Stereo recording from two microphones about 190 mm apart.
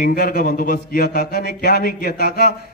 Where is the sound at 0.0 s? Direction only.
50° left (ahead or behind).